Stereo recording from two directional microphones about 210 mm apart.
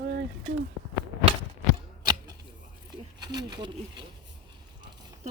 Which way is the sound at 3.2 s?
20° right (ahead or behind).